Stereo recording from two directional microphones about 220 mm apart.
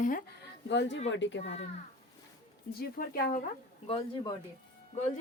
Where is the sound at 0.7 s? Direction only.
55° left (ahead or behind).